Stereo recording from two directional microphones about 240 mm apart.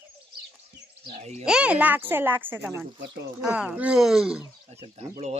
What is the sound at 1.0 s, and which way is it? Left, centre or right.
Speech, right.